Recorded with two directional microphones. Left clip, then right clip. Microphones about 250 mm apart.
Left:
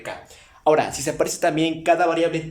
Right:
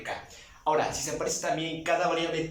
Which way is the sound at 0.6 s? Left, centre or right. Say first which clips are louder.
Left 8 dB; left.